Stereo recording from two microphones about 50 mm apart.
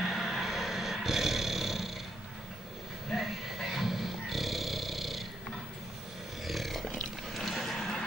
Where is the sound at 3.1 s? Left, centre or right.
Centre.